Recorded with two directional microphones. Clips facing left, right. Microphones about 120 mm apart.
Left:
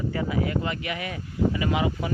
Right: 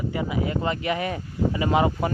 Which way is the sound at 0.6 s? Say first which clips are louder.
Right 5 dB; 35° right (ahead or behind).